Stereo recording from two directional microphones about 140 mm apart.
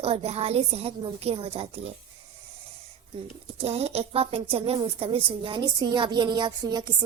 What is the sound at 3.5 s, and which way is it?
A woman's voice, 45° right (ahead or behind).